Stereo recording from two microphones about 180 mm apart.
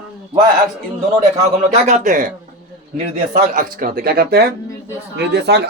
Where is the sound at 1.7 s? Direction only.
45° right (ahead or behind).